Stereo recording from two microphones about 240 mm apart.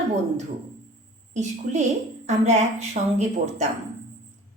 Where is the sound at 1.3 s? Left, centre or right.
Right.